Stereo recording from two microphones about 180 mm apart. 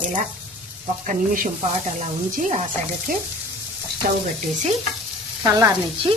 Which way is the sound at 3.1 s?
50° right (ahead or behind).